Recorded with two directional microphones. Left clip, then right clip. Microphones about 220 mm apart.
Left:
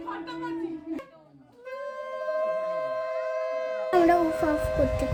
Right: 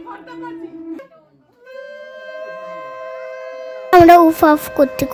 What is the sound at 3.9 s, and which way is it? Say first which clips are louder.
Speech: right 15 dB; 45° right (ahead or behind).